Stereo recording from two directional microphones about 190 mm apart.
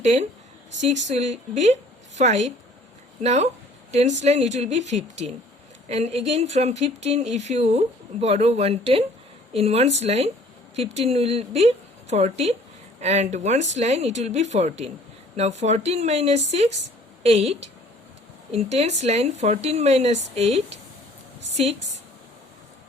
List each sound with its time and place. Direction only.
0.0 s speech: 35° right (ahead or behind)